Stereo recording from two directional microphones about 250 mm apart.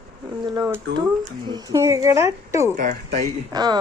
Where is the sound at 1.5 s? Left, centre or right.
Centre.